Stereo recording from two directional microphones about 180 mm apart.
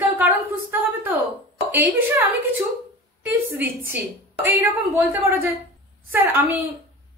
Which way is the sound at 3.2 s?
10° right (ahead or behind).